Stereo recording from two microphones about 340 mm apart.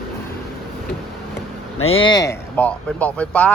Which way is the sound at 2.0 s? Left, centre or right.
Centre.